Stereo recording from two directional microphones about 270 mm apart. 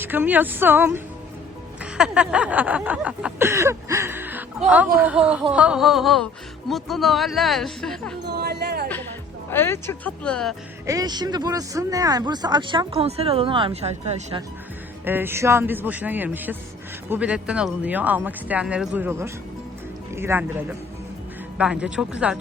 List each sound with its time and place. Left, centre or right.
0.0 s speech: centre
1.8 s a sound: centre
8.3 s speech: right
9.5 s speech: centre
10.8 s speech: centre
15.0 s speech: centre
17.1 s a sound: centre
20.1 s speech: centre
21.6 s a sound: centre